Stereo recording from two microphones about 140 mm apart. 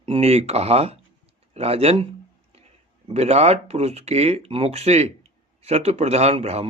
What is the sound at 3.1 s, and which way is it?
Speech, 50° right (ahead or behind).